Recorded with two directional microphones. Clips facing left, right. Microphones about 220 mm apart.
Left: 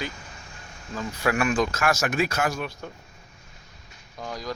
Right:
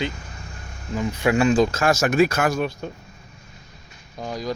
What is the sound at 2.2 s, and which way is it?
Speech, 50° right (ahead or behind).